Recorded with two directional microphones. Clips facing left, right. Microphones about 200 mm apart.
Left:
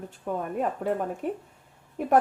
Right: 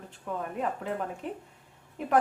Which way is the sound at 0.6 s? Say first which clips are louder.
Left 5 dB; 45° left (ahead or behind).